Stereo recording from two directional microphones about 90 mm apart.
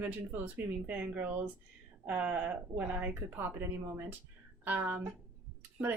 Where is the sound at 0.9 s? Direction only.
15° right (ahead or behind).